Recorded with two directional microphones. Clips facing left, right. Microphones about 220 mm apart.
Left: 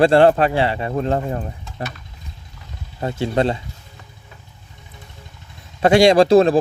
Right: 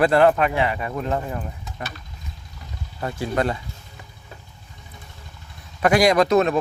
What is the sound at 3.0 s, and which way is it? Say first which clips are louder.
Speech: left 4 dB; 25° left (ahead or behind).